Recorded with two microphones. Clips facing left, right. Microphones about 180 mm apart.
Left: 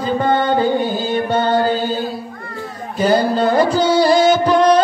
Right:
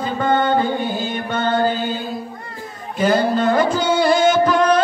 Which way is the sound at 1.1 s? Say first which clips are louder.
Left 6 dB; 35° left (ahead or behind).